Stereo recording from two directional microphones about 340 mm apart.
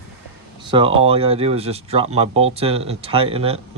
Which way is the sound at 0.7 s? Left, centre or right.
Centre.